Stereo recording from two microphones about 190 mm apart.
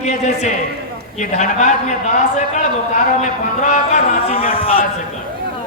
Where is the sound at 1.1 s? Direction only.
40° left (ahead or behind).